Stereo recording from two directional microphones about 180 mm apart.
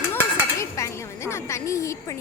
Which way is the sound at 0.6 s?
15° left (ahead or behind).